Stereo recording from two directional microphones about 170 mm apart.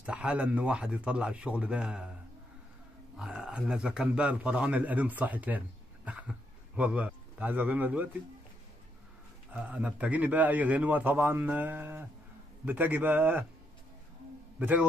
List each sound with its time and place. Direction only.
0.0 s a man's voice: 10° right (ahead or behind)
3.2 s a man's voice: 5° right (ahead or behind)
6.0 s a sound: 5° right (ahead or behind)
6.8 s a man's voice: 10° right (ahead or behind)
9.5 s a man's voice: 10° right (ahead or behind)
14.6 s a man's voice: 10° right (ahead or behind)